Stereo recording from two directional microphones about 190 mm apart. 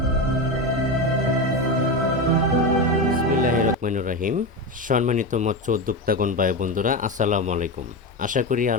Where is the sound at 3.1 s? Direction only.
50° right (ahead or behind).